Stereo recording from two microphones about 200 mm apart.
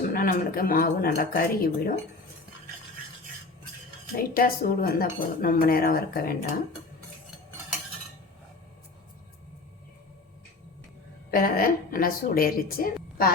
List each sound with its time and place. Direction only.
0.1 s speech: 45° left (ahead or behind)
4.2 s speech: 45° left (ahead or behind)
11.3 s speech: 45° left (ahead or behind)